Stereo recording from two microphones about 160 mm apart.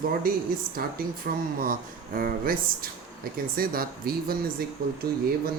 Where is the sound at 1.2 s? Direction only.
65° right (ahead or behind).